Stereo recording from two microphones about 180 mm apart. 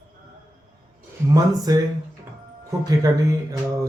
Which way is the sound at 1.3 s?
20° right (ahead or behind).